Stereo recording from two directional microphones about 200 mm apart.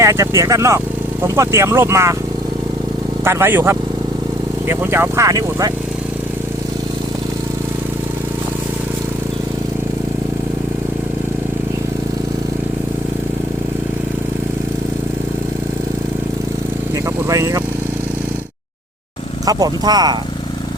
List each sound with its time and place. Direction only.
0.0 s speech: 15° right (ahead or behind)
3.2 s speech: 10° right (ahead or behind)
17.2 s speech: 15° right (ahead or behind)
19.5 s speech: 20° right (ahead or behind)